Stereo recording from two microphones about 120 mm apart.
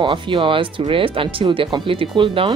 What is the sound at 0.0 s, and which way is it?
A woman's voice, 45° right (ahead or behind).